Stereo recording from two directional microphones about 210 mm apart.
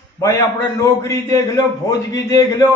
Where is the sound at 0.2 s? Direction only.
15° left (ahead or behind).